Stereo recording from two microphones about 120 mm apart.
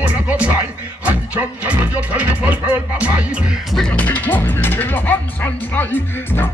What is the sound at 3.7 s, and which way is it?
Speech, 10° left (ahead or behind).